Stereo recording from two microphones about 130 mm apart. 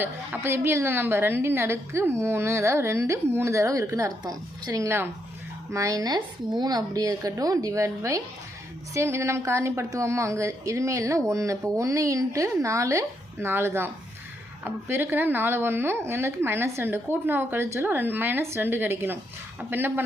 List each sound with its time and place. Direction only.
0.0 s a woman's voice: 20° right (ahead or behind)